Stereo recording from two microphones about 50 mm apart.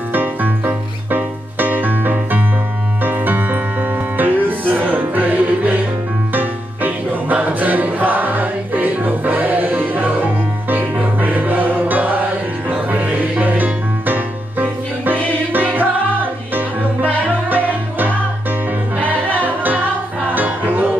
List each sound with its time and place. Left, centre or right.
0.1 s music: right
17.3 s music: right